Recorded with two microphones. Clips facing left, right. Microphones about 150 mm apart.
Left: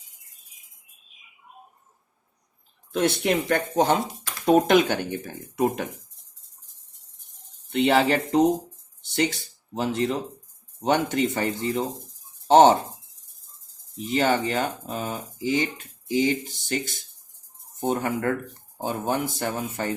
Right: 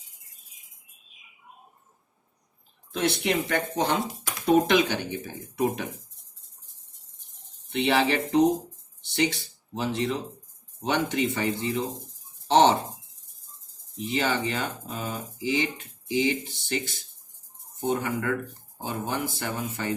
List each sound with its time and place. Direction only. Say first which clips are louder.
2.9 s speech: left 3 dB; 50° left (ahead or behind)
7.7 s speech: left 3 dB; 45° left (ahead or behind)
9.8 s speech: left 3 dB; 45° left (ahead or behind)
14.1 s speech: left 4 dB; 45° left (ahead or behind)